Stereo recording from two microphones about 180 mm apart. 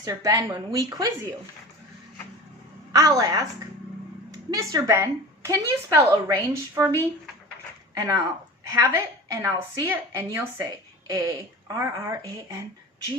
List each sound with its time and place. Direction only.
0.0 s a woman's voice: 20° right (ahead or behind)
2.9 s a woman's voice: 20° right (ahead or behind)